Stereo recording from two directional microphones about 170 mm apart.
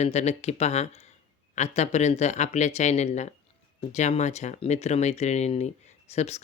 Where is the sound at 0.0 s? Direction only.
40° left (ahead or behind).